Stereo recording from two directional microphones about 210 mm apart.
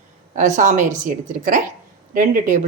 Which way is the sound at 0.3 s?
35° right (ahead or behind).